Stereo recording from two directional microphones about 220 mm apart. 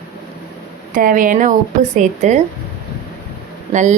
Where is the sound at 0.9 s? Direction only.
40° right (ahead or behind).